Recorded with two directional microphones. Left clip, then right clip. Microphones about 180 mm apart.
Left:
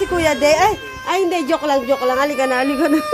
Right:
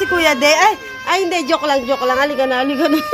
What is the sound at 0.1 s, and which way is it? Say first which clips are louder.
Speech: right 2 dB; 10° left (ahead or behind).